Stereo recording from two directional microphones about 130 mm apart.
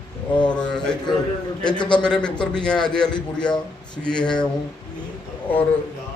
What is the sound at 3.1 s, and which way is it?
Speech, 35° left (ahead or behind).